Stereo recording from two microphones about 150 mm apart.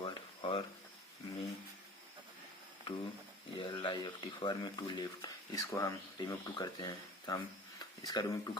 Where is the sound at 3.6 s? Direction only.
30° left (ahead or behind).